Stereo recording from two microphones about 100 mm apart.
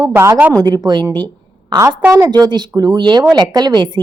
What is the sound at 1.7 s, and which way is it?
Speech, 35° right (ahead or behind).